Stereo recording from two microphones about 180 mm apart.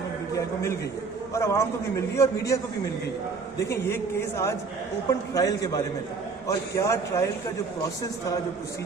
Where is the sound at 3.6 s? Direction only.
15° left (ahead or behind).